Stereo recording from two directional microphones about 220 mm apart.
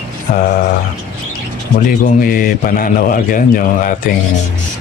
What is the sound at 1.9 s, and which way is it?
Speech, 40° left (ahead or behind).